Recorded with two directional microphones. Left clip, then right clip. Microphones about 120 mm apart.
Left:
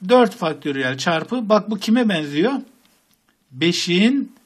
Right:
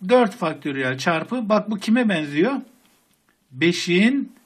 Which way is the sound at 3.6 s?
25° left (ahead or behind).